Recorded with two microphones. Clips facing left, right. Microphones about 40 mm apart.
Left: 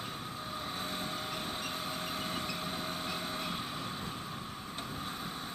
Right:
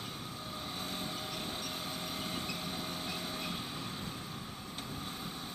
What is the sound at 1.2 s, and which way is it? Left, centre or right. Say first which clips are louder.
Vehicle: left 2 dB; left.